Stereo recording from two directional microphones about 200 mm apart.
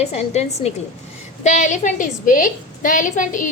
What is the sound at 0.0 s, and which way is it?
A woman's voice, 30° left (ahead or behind).